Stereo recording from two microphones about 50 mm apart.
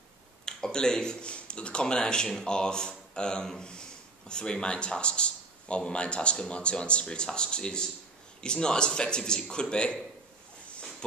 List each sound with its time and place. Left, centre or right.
0.5 s speech: centre